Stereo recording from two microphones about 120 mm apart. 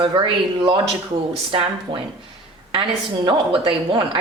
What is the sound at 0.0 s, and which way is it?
Speech, 45° right (ahead or behind).